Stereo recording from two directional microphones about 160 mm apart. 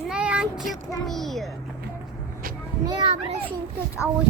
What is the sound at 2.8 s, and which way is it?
Children playing, 30° right (ahead or behind).